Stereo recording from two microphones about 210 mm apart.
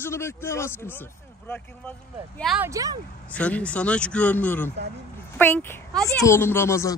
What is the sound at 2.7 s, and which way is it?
Speech, 15° right (ahead or behind).